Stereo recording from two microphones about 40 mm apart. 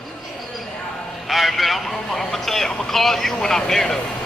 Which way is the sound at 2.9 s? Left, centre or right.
Centre.